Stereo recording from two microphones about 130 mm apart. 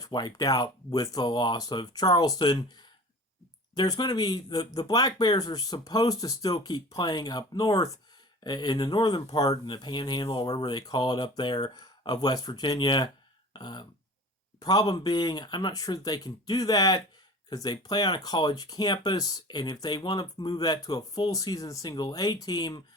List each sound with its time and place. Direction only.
0.0 s speech: 35° left (ahead or behind)
13.5 s a sound: 35° left (ahead or behind)
14.6 s speech: 30° left (ahead or behind)